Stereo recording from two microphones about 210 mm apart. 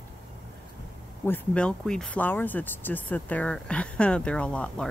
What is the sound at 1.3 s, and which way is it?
Speech, 5° left (ahead or behind).